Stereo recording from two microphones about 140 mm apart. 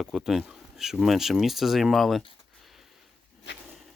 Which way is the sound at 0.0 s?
Centre (ahead or behind).